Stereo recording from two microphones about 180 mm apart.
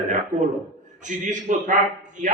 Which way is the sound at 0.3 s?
20° right (ahead or behind).